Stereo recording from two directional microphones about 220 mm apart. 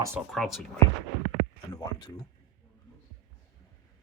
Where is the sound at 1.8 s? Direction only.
20° left (ahead or behind).